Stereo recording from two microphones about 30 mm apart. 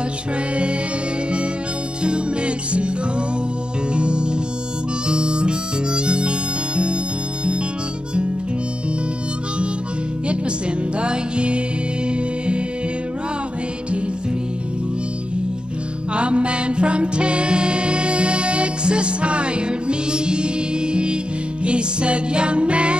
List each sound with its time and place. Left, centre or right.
2.0 s music: right
3.9 s music: right
5.0 s harmonica: right
11.0 s music: right
16.1 s music: right